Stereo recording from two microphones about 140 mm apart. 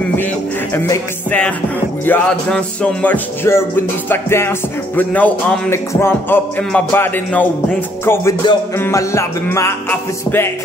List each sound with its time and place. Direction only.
0.7 s music: 15° left (ahead or behind)